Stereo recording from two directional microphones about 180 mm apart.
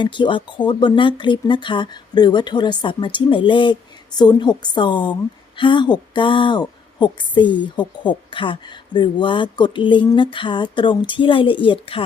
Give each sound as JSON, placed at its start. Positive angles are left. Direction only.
{"t": 0.0, "sound": "a woman's voice", "side_deg": 25}